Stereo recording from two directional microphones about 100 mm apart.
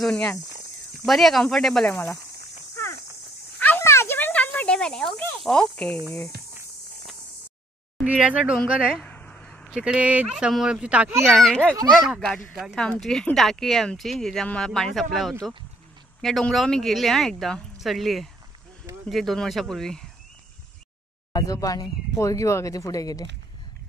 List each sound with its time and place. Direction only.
0.1 s speech: 10° left (ahead or behind)
1.0 s speech: centre (ahead or behind)
3.5 s a sound: 20° left (ahead or behind)
5.4 s speech: 10° left (ahead or behind)
8.0 s speech: 10° right (ahead or behind)
9.0 s a sound: 15° left (ahead or behind)
9.7 s speech: 10° right (ahead or behind)
11.2 s speech: centre (ahead or behind)
12.5 s speech: 5° right (ahead or behind)
12.8 s speech: 5° left (ahead or behind)
21.3 s speech: 40° left (ahead or behind)